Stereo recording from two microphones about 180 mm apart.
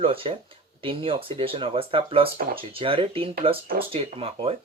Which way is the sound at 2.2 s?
55° right (ahead or behind).